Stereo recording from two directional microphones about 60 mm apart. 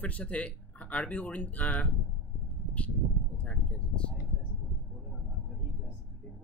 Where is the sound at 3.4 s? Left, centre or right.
Centre.